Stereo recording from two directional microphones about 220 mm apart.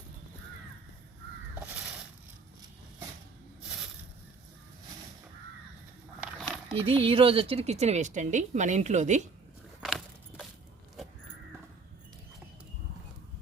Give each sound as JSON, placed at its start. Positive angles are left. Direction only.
{"t": 6.4, "sound": "a sound", "side_deg": 0}
{"t": 6.8, "sound": "a woman's voice", "side_deg": -25}
{"t": 9.8, "sound": "keys jangling", "side_deg": 0}